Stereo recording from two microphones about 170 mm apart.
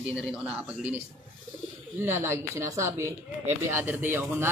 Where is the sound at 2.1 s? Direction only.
15° right (ahead or behind).